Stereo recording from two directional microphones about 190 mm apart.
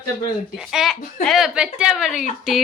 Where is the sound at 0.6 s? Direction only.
Centre (ahead or behind).